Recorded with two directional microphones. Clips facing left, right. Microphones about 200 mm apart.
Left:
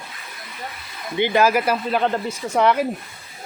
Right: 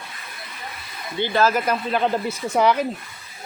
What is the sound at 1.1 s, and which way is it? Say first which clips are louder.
Speech: left 2 dB; 15° left (ahead or behind).